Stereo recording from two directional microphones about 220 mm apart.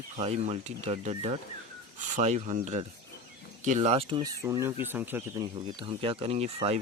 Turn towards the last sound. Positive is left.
turn(degrees=-25)  # may be behind; listen again after turning